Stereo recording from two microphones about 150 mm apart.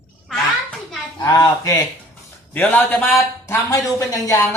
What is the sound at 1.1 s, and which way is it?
Speech, 25° left (ahead or behind).